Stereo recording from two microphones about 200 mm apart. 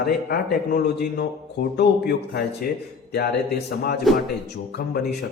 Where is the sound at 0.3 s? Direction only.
55° left (ahead or behind).